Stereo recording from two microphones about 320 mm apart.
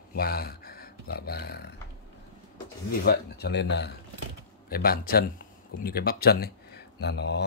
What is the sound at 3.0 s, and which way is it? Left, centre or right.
Speech, left.